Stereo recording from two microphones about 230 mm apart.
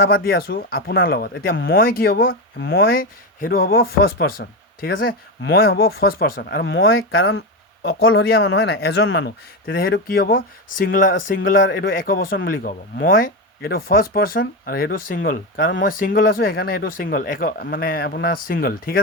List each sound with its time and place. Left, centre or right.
0.0 s speech: left
8.1 s speech: left
8.4 s speech: left
8.7 s speech: left